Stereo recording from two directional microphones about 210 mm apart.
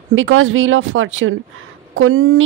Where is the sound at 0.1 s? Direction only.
70° right (ahead or behind).